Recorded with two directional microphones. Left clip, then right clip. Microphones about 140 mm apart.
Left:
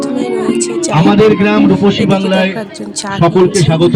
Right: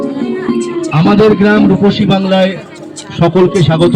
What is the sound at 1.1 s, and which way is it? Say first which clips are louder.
A man's voice: right 2 dB; 25° right (ahead or behind).